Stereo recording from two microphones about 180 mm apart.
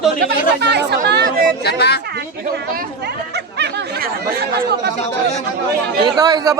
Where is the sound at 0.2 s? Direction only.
65° right (ahead or behind).